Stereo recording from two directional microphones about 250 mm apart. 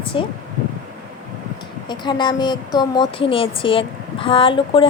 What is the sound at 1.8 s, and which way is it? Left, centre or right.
A woman's voice, centre.